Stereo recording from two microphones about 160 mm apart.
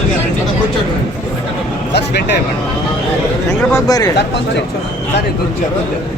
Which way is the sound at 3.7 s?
20° left (ahead or behind).